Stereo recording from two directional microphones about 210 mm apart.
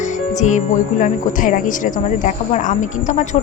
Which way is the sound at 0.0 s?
35° left (ahead or behind).